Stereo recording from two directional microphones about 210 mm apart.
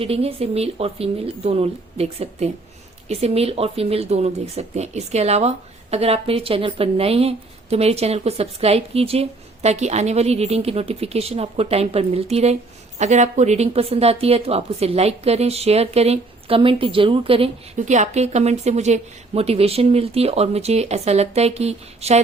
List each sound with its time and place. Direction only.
0.0 s speech: 30° right (ahead or behind)